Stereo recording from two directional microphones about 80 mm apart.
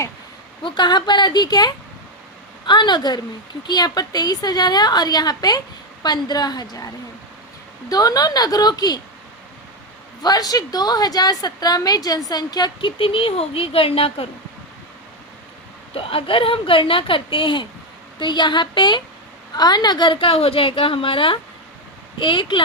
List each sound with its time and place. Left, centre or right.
0.6 s a woman's voice: left
10.2 s a woman's voice: left
16.2 s a woman's voice: left
18.2 s speech: left
19.5 s a woman's voice: left